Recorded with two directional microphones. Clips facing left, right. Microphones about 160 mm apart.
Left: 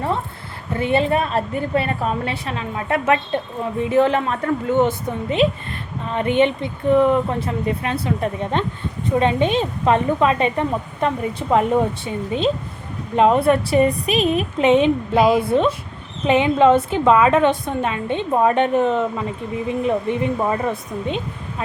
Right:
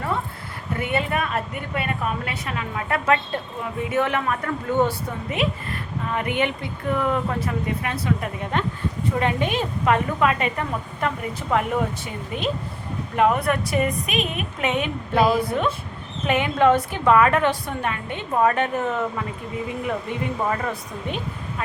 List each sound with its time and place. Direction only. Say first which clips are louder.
0.8 s a woman's voice: left 6 dB; 30° left (ahead or behind)